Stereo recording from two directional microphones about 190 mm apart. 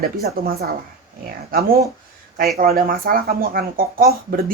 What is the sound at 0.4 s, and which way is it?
Speech, 50° right (ahead or behind).